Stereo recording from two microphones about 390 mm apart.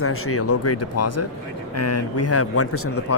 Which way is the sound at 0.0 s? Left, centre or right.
Left.